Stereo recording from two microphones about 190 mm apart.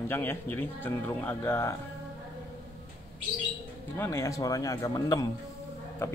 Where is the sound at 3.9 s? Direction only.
15° left (ahead or behind).